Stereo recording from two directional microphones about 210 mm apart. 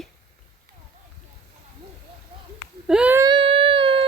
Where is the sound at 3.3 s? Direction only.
25° right (ahead or behind).